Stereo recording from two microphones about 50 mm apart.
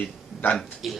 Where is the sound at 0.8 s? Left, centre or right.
Centre.